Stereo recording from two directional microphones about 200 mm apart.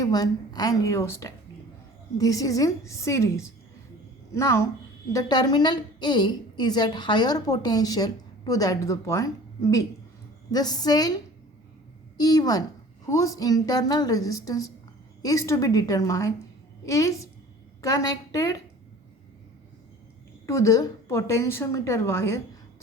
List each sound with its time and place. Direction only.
0.0 s a woman's voice: 20° left (ahead or behind)
12.1 s a woman's voice: 20° left (ahead or behind)
20.5 s a woman's voice: 15° left (ahead or behind)